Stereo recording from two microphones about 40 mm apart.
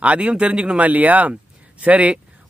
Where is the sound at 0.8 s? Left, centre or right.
Right.